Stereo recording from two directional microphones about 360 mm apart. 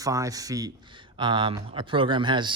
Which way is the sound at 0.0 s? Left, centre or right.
Centre.